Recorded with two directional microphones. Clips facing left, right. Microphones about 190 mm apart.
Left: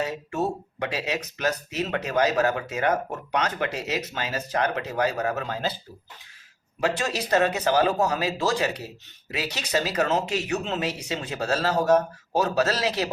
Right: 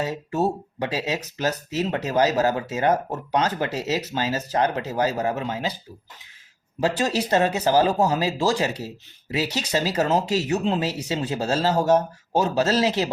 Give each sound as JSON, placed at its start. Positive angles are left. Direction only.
{"t": 0.0, "sound": "speech", "side_deg": -30}
{"t": 6.7, "sound": "speech", "side_deg": -30}